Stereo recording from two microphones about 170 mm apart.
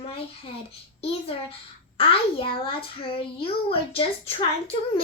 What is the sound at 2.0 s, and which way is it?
A child's voice, 30° left (ahead or behind).